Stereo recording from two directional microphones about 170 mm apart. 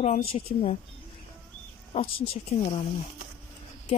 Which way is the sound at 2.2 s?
35° left (ahead or behind).